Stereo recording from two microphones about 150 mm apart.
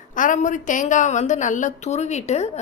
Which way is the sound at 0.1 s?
60° left (ahead or behind).